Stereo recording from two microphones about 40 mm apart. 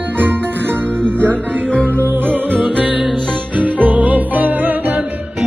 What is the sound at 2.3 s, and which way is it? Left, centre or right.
Music, right.